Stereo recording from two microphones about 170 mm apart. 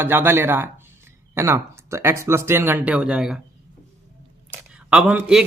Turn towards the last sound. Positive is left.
turn(degrees=-5)  # may be behind; listen again after turning